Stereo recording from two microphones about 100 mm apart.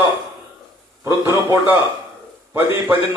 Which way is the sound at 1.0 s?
25° right (ahead or behind).